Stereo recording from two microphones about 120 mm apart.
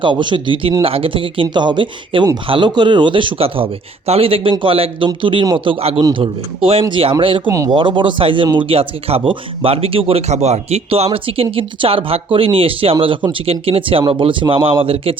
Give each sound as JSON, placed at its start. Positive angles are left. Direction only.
{"t": 0.0, "sound": "speech", "side_deg": -40}
{"t": 6.0, "sound": "a man's voice", "side_deg": -30}
{"t": 6.2, "sound": "speech", "side_deg": -50}